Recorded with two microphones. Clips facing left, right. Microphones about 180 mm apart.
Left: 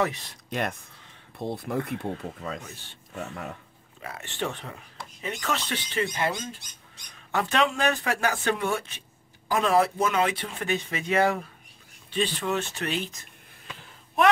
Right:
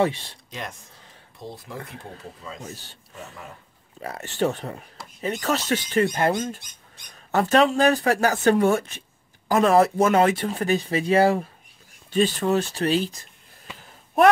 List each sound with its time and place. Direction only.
0.0 s speech: 30° right (ahead or behind)
0.5 s speech: 60° left (ahead or behind)
2.6 s speech: 35° right (ahead or behind)
4.0 s speech: 40° right (ahead or behind)
12.1 s speech: 45° right (ahead or behind)